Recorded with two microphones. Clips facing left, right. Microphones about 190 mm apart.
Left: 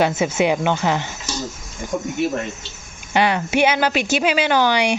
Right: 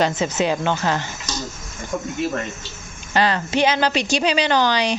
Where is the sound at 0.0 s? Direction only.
10° left (ahead or behind).